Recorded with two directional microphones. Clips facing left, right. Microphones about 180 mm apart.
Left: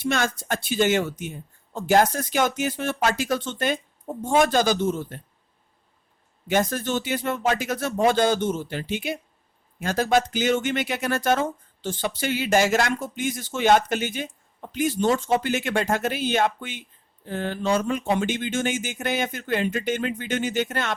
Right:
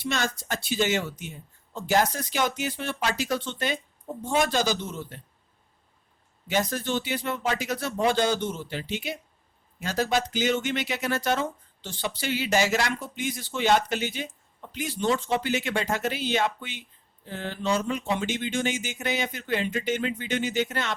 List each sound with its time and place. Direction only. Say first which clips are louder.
0.0 s speech: left 4 dB; 50° left (ahead or behind)
6.5 s speech: left 3 dB; 50° left (ahead or behind)